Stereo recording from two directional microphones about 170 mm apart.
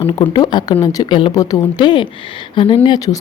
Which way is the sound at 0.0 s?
30° left (ahead or behind).